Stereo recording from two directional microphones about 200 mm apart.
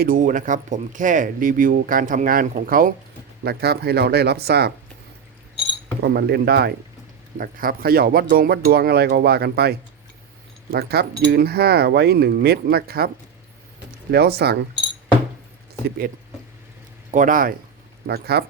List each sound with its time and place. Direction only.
0.0 s speech: 45° right (ahead or behind)
6.0 s speech: 55° right (ahead or behind)
14.1 s speech: 55° right (ahead or behind)
17.1 s speech: 40° right (ahead or behind)